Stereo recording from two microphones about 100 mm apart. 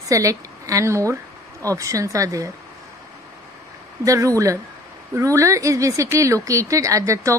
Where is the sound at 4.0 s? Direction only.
35° right (ahead or behind).